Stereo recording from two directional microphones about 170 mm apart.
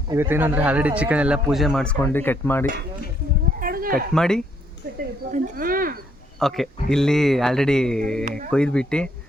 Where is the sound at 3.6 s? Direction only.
55° right (ahead or behind).